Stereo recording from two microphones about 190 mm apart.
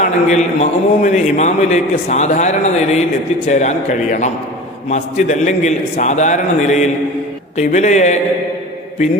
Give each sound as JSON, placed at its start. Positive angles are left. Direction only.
{"t": 0.0, "sound": "a man's voice", "side_deg": 40}